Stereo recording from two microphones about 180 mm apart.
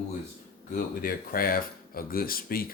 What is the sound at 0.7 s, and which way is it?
Speech, 55° left (ahead or behind).